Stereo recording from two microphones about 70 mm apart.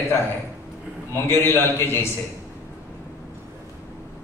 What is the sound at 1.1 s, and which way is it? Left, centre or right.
Speech, left.